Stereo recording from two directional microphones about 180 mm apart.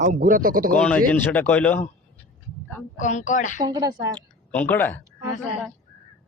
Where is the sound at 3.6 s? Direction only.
25° right (ahead or behind).